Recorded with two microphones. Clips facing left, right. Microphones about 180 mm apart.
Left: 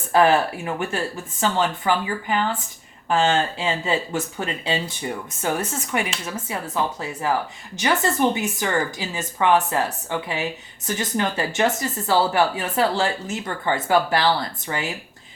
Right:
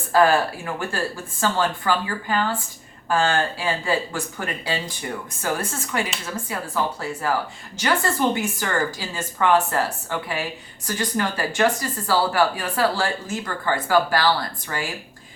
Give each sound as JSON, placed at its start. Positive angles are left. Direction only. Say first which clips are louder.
{"t": 0.1, "sound": "speech", "louder": "even", "side_deg": 20}